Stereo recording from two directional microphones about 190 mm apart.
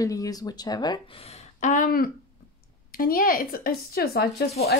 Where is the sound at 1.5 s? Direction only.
40° left (ahead or behind).